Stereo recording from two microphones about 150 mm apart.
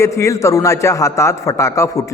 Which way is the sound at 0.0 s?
20° left (ahead or behind).